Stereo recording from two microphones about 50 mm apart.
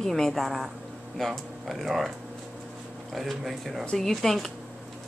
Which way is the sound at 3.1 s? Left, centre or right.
Centre.